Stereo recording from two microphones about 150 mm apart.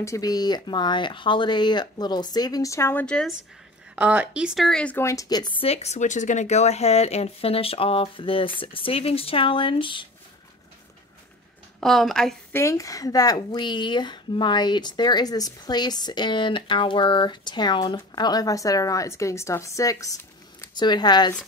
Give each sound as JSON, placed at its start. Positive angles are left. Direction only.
{"t": 0.0, "sound": "a woman's voice", "side_deg": 20}
{"t": 3.9, "sound": "speech", "side_deg": -10}
{"t": 5.0, "sound": "speech", "side_deg": 25}
{"t": 11.8, "sound": "speech", "side_deg": 0}
{"t": 12.5, "sound": "a woman's voice", "side_deg": 20}